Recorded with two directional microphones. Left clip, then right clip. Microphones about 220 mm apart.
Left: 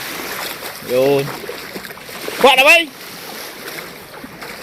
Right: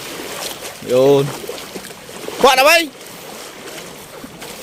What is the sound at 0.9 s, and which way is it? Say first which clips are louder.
Speech: right 3 dB; 30° right (ahead or behind).